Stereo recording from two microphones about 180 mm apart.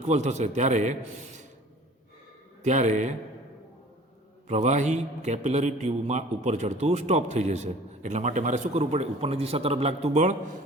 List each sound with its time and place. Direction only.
0.1 s a man's voice: 40° right (ahead or behind)
2.6 s a man's voice: 40° right (ahead or behind)
4.4 s a man's voice: 40° right (ahead or behind)